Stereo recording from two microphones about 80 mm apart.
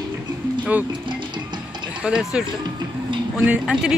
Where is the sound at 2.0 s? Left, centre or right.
Centre.